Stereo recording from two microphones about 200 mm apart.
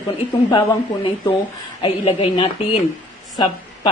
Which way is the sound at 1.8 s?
25° left (ahead or behind).